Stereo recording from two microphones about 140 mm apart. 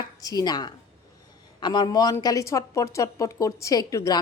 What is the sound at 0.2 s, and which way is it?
A woman's voice, 25° left (ahead or behind).